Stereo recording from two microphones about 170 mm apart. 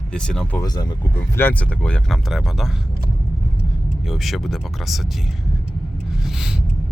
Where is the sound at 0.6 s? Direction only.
25° left (ahead or behind).